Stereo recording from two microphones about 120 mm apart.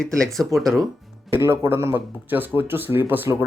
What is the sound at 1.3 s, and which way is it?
Speech, 20° right (ahead or behind).